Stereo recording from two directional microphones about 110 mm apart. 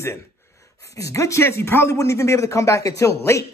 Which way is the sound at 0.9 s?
30° left (ahead or behind).